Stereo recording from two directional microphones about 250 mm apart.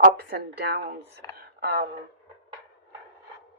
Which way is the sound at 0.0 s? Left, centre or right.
Right.